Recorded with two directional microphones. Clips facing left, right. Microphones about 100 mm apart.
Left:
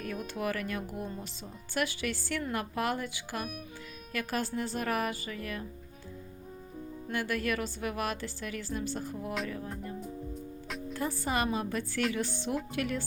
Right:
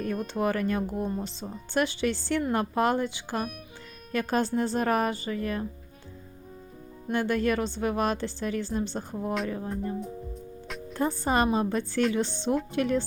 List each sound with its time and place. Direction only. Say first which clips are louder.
0.0 s a woman's voice: right 7 dB; 35° right (ahead or behind)
7.1 s a woman's voice: right 7 dB; 30° right (ahead or behind)
10.7 s music: even; centre (ahead or behind)
10.9 s a woman's voice: right 7 dB; 35° right (ahead or behind)